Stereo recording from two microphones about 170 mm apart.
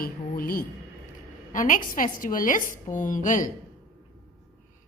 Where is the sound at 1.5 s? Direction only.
50° left (ahead or behind).